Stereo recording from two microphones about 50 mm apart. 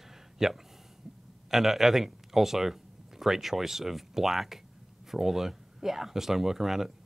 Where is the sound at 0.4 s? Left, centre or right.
Centre.